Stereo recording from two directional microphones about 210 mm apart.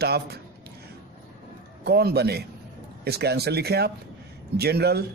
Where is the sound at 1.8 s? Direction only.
50° right (ahead or behind).